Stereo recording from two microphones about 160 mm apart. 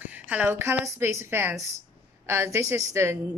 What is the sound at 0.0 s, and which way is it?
A woman's voice, 10° right (ahead or behind).